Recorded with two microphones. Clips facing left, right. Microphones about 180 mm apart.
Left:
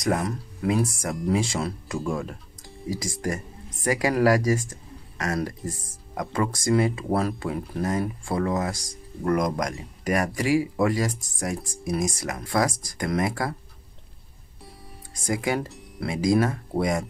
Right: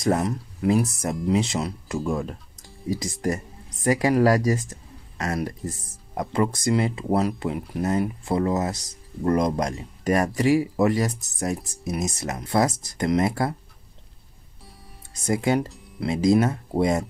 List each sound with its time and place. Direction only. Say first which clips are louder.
0.0 s speech: right 2 dB; 25° right (ahead or behind)
15.2 s speech: right 4 dB; 25° right (ahead or behind)